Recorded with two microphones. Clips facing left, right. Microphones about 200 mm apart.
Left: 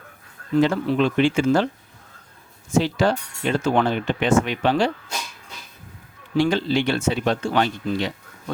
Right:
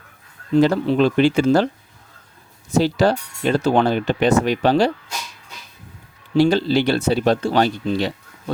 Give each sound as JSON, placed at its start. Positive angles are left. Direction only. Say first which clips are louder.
{"t": 0.5, "sound": "speech", "louder": "right 3 dB", "side_deg": -35}
{"t": 2.7, "sound": "speech", "louder": "right 3 dB", "side_deg": -35}
{"t": 6.3, "sound": "speech", "louder": "right 4 dB", "side_deg": -35}